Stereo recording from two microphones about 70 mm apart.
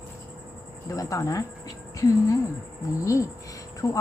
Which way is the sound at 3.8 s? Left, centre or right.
Left.